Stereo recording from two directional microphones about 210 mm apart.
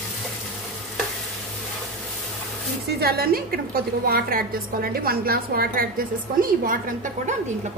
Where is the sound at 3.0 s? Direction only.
45° right (ahead or behind).